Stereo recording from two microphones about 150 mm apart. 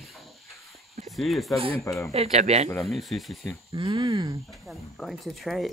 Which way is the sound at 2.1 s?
45° right (ahead or behind).